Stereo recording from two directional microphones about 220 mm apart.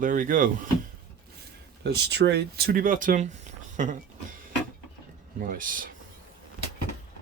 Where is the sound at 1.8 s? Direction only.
50° right (ahead or behind).